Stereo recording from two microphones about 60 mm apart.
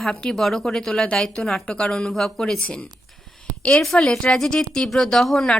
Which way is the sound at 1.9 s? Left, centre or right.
Centre.